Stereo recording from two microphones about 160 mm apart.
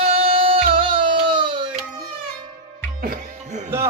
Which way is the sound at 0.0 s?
40° right (ahead or behind).